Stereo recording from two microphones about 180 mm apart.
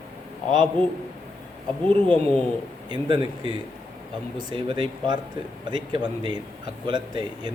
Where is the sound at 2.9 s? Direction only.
25° right (ahead or behind).